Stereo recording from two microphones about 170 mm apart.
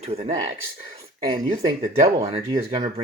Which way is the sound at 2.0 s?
35° right (ahead or behind).